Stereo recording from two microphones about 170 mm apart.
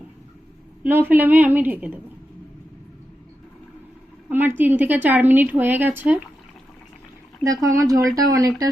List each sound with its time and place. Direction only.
0.9 s a woman's voice: 10° right (ahead or behind)
4.3 s a woman's voice: 10° right (ahead or behind)
7.4 s speech: 20° right (ahead or behind)